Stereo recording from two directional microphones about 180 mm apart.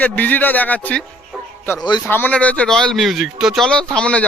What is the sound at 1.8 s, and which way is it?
Speech, 25° left (ahead or behind).